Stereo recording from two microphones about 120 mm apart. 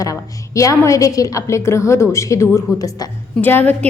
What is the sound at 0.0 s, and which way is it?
A woman's voice, 25° left (ahead or behind).